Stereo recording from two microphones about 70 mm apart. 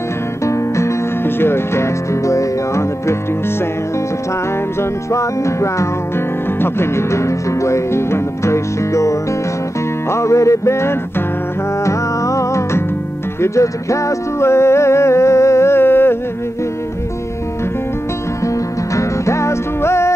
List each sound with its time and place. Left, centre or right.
0.5 s speech: left
5.1 s music: left
10.1 s music: left
18.9 s music: left